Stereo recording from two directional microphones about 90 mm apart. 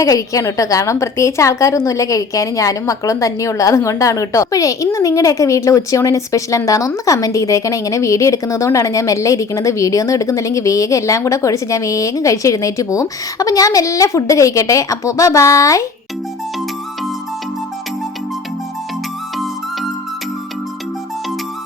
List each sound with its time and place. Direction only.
0.0 s a woman's voice: 40° left (ahead or behind)